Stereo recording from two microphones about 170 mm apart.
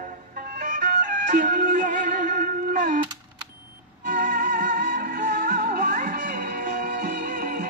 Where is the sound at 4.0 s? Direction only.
55° right (ahead or behind).